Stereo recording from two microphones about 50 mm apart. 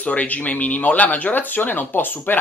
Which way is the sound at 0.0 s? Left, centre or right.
Left.